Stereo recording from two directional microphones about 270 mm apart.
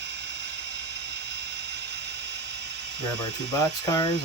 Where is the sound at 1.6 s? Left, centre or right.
Right.